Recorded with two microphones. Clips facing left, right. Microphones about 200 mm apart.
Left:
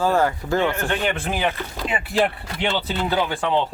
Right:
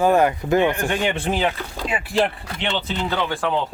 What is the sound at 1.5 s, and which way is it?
Speech, centre (ahead or behind).